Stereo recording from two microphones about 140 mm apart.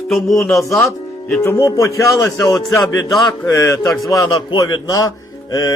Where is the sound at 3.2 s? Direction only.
25° left (ahead or behind).